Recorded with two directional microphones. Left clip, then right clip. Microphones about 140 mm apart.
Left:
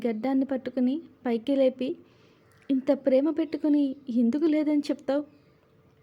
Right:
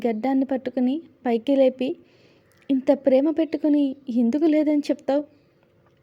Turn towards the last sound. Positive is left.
turn(degrees=-20)  # may be behind; listen again after turning